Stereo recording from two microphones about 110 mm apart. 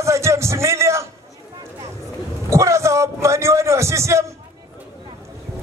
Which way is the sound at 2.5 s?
25° right (ahead or behind).